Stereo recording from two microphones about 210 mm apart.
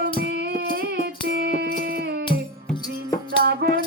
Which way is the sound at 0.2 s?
50° right (ahead or behind).